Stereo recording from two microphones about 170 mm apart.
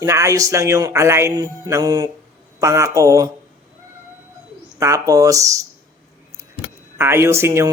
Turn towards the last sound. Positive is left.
turn(degrees=-15)  # may be behind; listen again after turning